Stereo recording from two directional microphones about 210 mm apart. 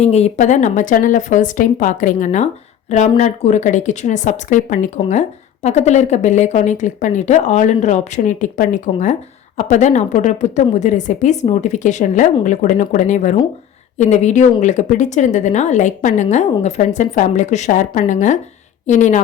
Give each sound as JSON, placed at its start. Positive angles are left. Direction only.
{"t": 0.0, "sound": "speech", "side_deg": 30}